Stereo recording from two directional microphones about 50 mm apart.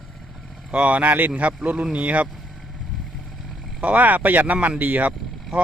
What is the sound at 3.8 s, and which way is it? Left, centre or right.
Speech, right.